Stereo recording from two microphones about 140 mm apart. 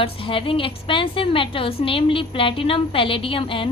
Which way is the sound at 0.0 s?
40° left (ahead or behind).